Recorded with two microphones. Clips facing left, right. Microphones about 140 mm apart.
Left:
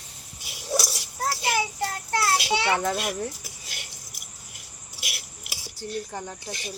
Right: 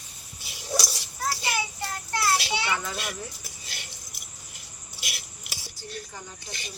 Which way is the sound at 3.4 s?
10° left (ahead or behind).